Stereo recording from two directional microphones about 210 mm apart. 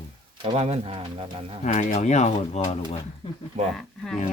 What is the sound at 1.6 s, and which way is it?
Speech, 35° left (ahead or behind).